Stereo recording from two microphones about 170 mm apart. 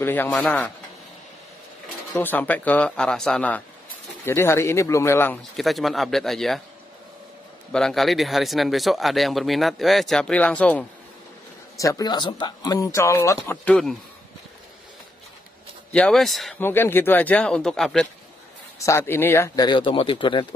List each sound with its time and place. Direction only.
0.0 s speech: 10° left (ahead or behind)
2.1 s speech: 10° left (ahead or behind)
5.6 s speech: centre (ahead or behind)
7.7 s speech: centre (ahead or behind)
11.7 s speech: 20° left (ahead or behind)
15.9 s speech: 5° left (ahead or behind)
16.5 s speech: 15° left (ahead or behind)
18.8 s speech: 15° left (ahead or behind)